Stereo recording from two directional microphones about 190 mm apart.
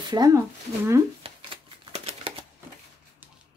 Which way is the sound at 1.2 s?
30° right (ahead or behind).